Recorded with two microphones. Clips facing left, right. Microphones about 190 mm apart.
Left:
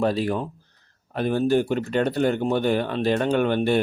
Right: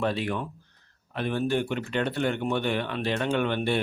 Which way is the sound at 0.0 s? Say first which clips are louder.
Left 5 dB; 40° left (ahead or behind).